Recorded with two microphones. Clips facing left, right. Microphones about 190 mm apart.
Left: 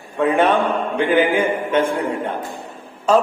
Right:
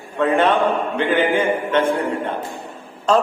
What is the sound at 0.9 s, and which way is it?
Speech, 10° left (ahead or behind).